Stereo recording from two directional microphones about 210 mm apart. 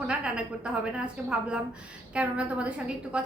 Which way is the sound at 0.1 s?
5° right (ahead or behind).